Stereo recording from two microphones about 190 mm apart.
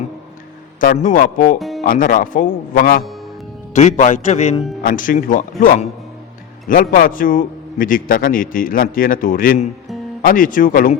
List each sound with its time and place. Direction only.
0.8 s a man's voice: 45° left (ahead or behind)
1.5 s music: centre (ahead or behind)
1.8 s a man's voice: 45° left (ahead or behind)
6.9 s a man's voice: 45° left (ahead or behind)